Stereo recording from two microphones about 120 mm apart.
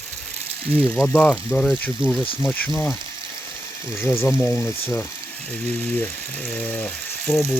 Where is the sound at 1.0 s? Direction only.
5° left (ahead or behind).